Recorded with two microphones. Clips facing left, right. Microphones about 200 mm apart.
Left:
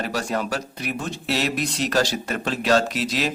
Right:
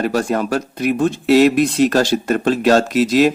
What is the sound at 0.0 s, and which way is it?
Speech, 50° right (ahead or behind).